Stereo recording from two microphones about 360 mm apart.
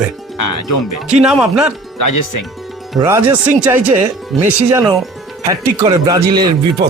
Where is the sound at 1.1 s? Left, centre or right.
Centre.